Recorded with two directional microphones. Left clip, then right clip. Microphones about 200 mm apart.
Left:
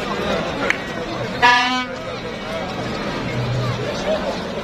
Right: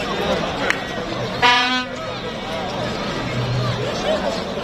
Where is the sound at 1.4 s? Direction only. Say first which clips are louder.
Left 1 dB; 25° left (ahead or behind).